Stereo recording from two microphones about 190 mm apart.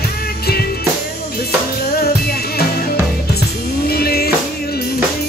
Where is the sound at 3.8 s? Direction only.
55° left (ahead or behind).